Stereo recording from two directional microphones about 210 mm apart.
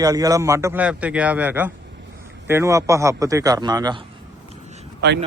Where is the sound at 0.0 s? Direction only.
15° right (ahead or behind).